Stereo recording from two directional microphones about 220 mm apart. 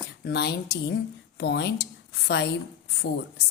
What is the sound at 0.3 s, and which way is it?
A woman's voice, 50° left (ahead or behind).